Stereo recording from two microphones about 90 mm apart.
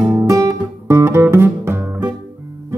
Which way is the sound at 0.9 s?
25° right (ahead or behind).